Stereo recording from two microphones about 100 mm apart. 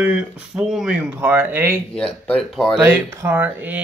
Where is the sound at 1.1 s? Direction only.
20° right (ahead or behind).